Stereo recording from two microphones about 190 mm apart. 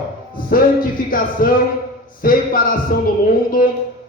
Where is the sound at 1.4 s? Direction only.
50° left (ahead or behind).